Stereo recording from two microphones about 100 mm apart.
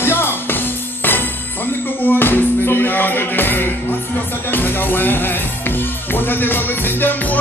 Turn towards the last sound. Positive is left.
turn(degrees=20)  # may be behind; listen again after turning